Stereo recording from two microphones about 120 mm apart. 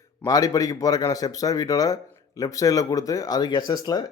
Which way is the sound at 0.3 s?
30° left (ahead or behind).